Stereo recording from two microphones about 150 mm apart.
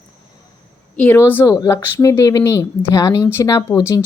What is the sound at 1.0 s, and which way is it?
A woman's voice, 15° left (ahead or behind).